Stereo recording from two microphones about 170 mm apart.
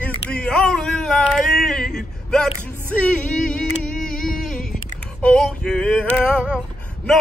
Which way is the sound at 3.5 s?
5° left (ahead or behind).